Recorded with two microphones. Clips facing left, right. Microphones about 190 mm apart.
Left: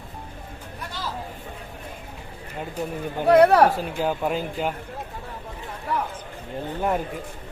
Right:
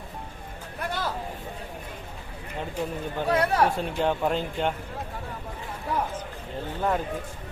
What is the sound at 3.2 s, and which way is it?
Speech, 65° left (ahead or behind).